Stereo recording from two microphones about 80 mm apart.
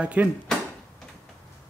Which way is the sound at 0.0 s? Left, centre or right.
Centre.